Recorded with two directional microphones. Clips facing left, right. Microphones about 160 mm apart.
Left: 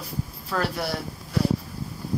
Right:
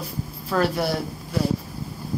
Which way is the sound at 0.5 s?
25° right (ahead or behind).